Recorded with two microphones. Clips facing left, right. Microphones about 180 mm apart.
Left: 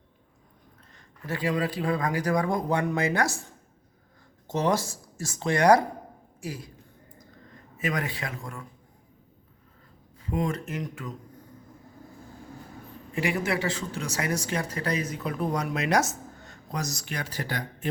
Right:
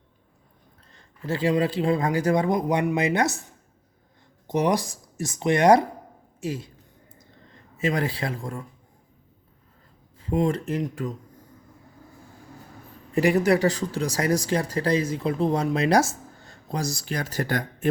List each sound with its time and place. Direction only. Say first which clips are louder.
0.9 s speech: right 5 dB; 30° right (ahead or behind)
4.4 s a man's voice: right 3 dB; 15° right (ahead or behind)
7.1 s a sound: left 2 dB; 25° right (ahead or behind)
10.2 s speech: right 5 dB; 30° right (ahead or behind)
13.1 s speech: right 8 dB; 40° right (ahead or behind)